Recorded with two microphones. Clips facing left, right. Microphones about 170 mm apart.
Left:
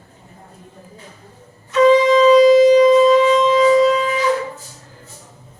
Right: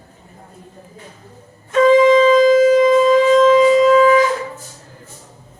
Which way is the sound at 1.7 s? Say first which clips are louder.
Right 1 dB; 50° right (ahead or behind).